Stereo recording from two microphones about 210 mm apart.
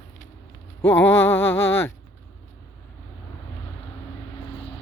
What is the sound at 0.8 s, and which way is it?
Speech, 10° left (ahead or behind).